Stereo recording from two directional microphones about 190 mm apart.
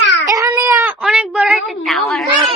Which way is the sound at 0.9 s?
Centre (ahead or behind).